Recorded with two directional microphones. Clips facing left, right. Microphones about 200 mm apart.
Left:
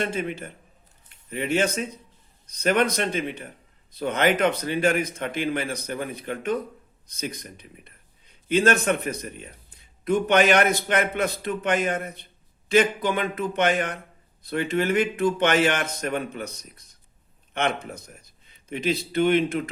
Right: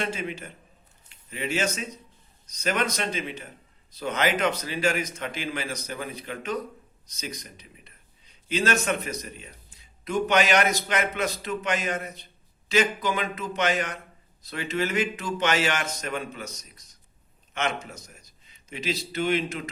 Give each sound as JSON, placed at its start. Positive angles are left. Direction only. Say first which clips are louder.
{"t": 0.0, "sound": "a man's voice", "louder": "left 3 dB", "side_deg": 55}